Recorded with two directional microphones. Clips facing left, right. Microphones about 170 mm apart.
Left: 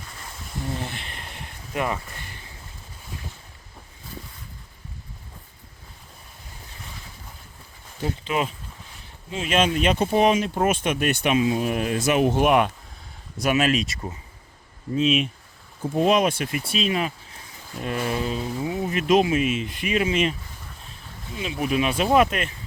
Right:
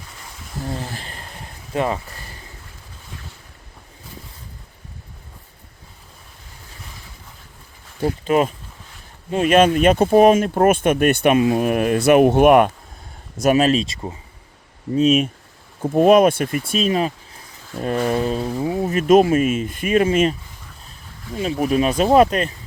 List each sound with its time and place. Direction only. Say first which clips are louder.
0.7 s a sound: right 3 dB; 35° right (ahead or behind)
1.7 s speech: right 5 dB; 30° right (ahead or behind)
8.0 s speech: right 8 dB; 45° right (ahead or behind)
13.3 s speech: right 6 dB; 40° right (ahead or behind); by 14.2 s 25° right (ahead or behind)
14.9 s speech: right 6 dB; 45° right (ahead or behind)
21.3 s speech: right 5 dB; 40° right (ahead or behind)